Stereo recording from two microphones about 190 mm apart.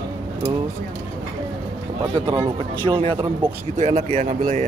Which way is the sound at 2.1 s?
20° right (ahead or behind).